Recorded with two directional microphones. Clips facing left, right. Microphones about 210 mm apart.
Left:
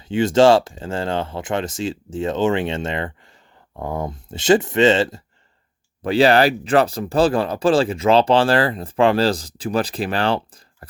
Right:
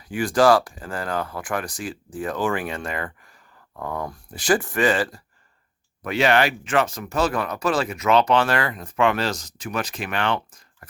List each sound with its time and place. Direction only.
0.0 s speech: 25° left (ahead or behind)